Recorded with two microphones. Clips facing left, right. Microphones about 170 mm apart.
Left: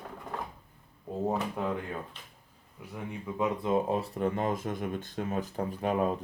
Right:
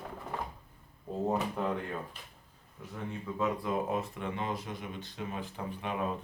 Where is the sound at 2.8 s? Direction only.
10° left (ahead or behind); by 6.1 s 40° left (ahead or behind).